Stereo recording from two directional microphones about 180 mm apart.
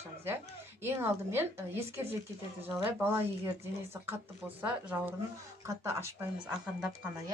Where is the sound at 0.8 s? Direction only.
15° right (ahead or behind).